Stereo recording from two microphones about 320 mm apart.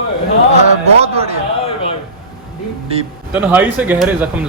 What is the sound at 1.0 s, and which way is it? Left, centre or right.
Speech, centre.